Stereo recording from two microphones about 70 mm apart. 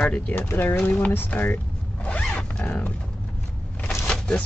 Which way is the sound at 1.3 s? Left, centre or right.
Centre.